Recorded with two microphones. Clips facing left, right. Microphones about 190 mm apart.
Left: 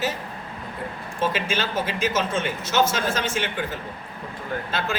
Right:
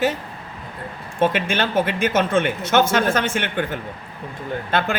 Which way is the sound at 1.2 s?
55° right (ahead or behind).